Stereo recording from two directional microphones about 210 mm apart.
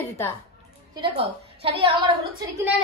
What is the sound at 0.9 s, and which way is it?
A woman's voice, 25° right (ahead or behind).